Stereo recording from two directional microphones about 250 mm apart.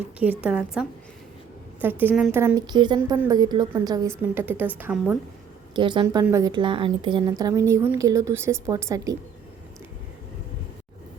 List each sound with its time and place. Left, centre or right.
0.2 s a woman's voice: centre
5.7 s a woman's voice: centre